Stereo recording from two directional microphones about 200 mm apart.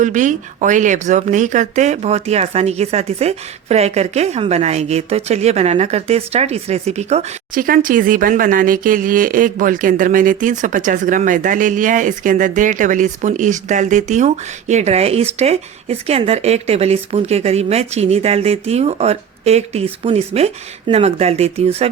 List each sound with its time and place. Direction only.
0.0 s speech: 40° right (ahead or behind)